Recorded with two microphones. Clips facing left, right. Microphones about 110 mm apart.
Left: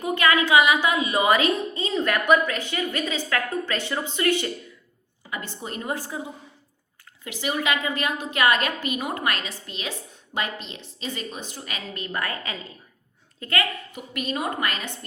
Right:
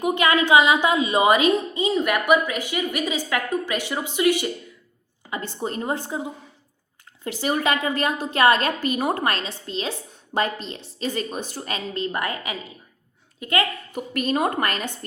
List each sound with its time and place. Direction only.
0.0 s a woman's voice: 20° right (ahead or behind)
5.3 s a woman's voice: 30° right (ahead or behind)
7.3 s a woman's voice: 40° right (ahead or behind); by 13.7 s 20° right (ahead or behind)
13.9 s a woman's voice: 45° right (ahead or behind)